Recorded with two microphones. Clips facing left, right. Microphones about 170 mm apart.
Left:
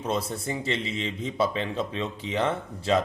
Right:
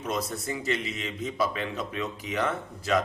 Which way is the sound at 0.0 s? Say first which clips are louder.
Left 2 dB; 30° left (ahead or behind).